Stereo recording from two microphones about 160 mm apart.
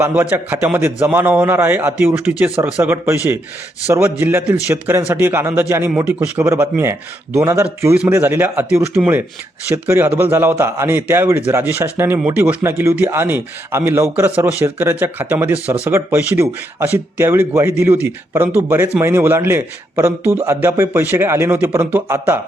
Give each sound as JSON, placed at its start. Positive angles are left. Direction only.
{"t": 0.0, "sound": "speech", "side_deg": -10}